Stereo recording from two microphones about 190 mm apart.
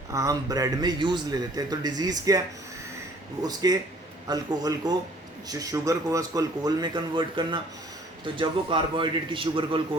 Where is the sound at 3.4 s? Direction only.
20° right (ahead or behind).